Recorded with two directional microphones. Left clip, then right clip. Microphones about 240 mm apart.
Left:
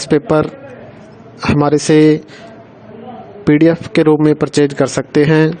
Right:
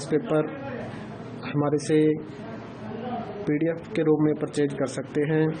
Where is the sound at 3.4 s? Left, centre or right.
Left.